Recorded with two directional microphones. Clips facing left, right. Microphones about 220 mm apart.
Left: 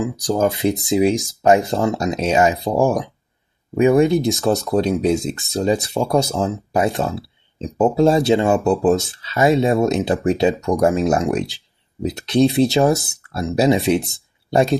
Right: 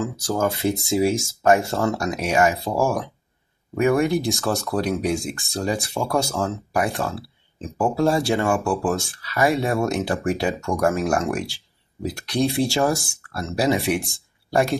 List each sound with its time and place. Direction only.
0.0 s speech: 15° left (ahead or behind)